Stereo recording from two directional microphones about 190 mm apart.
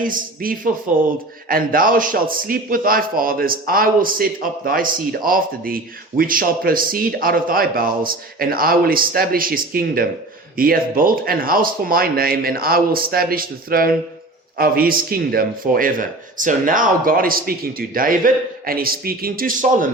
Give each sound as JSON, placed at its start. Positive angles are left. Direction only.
{"t": 0.0, "sound": "a man's voice", "side_deg": -45}